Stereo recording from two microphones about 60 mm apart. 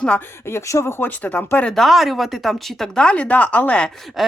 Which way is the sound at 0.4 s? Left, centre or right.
Left.